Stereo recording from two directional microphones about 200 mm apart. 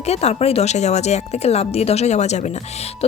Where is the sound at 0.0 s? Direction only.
30° left (ahead or behind).